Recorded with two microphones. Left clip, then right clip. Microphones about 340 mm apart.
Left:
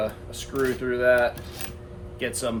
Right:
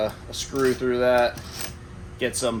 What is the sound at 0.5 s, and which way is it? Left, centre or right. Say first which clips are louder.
Speech: right 3 dB; centre.